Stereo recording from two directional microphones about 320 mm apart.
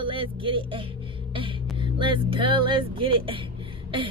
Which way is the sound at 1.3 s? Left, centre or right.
Centre.